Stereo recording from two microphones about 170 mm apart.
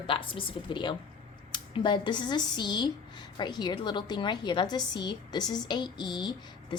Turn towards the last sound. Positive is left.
turn(degrees=25)  # may be behind; listen again after turning